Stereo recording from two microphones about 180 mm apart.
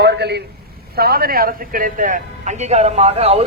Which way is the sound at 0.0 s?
70° right (ahead or behind).